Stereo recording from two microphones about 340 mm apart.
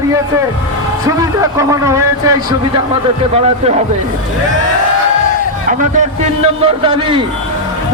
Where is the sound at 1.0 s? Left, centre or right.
Centre.